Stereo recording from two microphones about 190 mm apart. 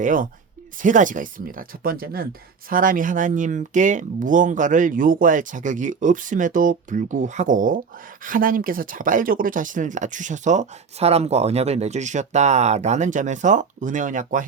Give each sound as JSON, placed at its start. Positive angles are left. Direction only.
{"t": 0.0, "sound": "speech", "side_deg": -45}